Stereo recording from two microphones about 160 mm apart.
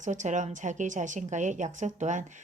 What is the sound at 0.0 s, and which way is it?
A woman's voice, 50° right (ahead or behind).